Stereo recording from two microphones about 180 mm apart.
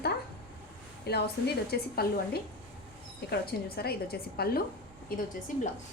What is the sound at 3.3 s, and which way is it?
A woman's voice, 60° left (ahead or behind).